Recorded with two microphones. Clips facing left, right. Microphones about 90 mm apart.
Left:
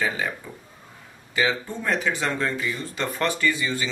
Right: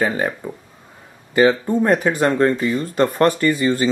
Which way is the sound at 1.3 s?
50° right (ahead or behind).